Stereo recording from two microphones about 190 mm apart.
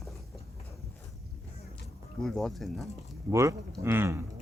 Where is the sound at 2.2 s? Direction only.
Centre (ahead or behind).